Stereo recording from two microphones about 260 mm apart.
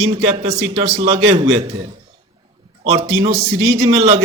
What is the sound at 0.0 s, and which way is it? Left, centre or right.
A man's voice, right.